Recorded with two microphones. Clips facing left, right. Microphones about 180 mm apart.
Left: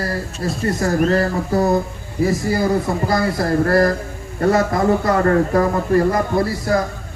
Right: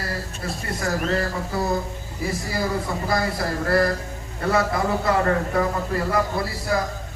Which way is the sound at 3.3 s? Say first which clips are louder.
Left 7 dB; 45° left (ahead or behind).